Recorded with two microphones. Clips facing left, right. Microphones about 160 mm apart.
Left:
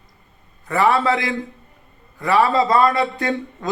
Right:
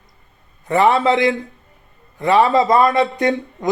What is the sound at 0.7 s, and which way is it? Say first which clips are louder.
A man's voice: right 3 dB; 20° right (ahead or behind).